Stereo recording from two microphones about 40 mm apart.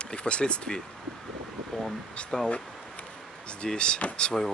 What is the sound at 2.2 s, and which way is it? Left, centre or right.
Speech, left.